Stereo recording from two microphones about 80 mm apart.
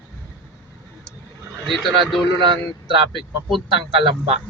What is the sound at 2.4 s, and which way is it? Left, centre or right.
Speech, right.